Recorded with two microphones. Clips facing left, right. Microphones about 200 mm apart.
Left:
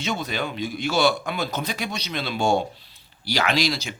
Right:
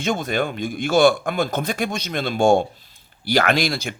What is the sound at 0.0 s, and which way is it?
Speech, 50° right (ahead or behind).